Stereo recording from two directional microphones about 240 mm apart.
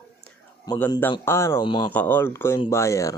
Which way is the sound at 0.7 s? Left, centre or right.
Centre.